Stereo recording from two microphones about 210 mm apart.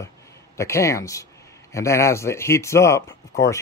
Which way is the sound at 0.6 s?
15° left (ahead or behind).